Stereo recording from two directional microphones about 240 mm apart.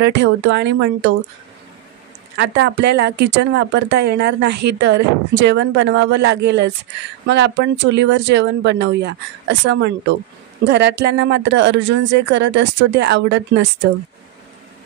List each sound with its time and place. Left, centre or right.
0.0 s speech: right
2.3 s speech: right